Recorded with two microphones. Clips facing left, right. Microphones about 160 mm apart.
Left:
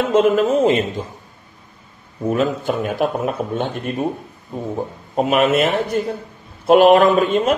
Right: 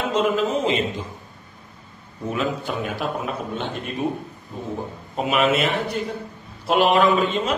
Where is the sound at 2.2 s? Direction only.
45° left (ahead or behind).